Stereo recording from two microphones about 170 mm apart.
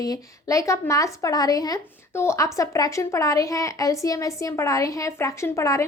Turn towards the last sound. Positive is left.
turn(degrees=15)  # may be behind; listen again after turning